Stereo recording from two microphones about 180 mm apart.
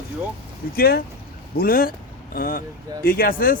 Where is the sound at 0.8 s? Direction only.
60° left (ahead or behind).